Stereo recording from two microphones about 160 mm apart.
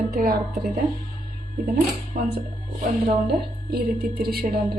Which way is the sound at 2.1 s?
60° right (ahead or behind).